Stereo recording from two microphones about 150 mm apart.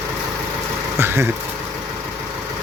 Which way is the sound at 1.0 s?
15° right (ahead or behind).